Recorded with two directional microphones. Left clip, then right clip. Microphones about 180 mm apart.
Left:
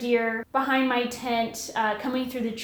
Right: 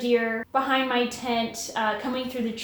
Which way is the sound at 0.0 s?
35° left (ahead or behind).